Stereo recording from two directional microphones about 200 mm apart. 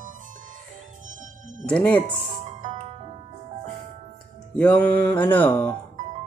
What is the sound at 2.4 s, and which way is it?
Music, 35° right (ahead or behind).